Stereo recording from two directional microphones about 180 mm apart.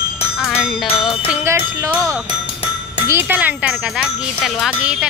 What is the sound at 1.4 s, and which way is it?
Speech, 15° right (ahead or behind).